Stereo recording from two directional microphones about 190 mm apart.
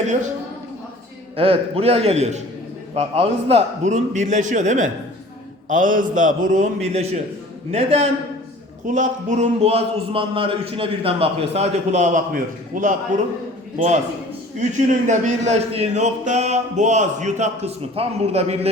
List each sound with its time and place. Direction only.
1.4 s a man's voice: 30° right (ahead or behind)